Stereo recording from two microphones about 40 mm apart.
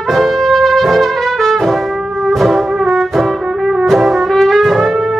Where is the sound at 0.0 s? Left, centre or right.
Centre.